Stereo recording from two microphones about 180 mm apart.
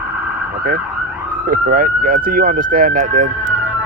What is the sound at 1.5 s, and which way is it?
Speech, 50° right (ahead or behind).